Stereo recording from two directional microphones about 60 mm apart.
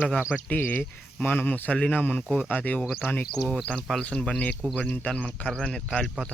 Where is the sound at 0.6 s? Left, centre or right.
Left.